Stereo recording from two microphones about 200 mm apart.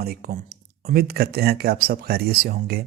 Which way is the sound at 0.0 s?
50° right (ahead or behind).